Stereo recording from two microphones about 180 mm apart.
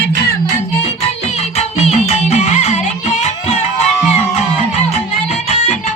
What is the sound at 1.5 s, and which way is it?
Music, 35° left (ahead or behind).